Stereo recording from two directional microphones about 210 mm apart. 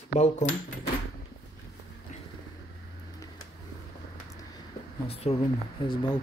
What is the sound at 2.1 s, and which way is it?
Vehicle, 35° left (ahead or behind).